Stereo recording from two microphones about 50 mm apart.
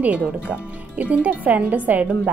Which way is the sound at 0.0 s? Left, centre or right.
Right.